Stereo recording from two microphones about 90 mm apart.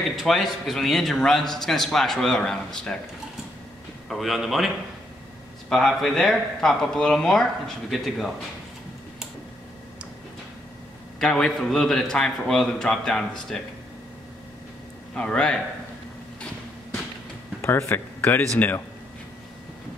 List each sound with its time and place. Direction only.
0.1 s speech: centre (ahead or behind)
4.1 s speech: centre (ahead or behind)
5.7 s speech: centre (ahead or behind)
11.1 s speech: 5° left (ahead or behind)
15.1 s a man's voice: 10° left (ahead or behind)
17.6 s speech: 30° left (ahead or behind)